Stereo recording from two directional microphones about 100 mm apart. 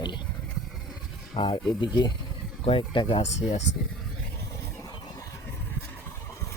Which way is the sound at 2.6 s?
65° left (ahead or behind).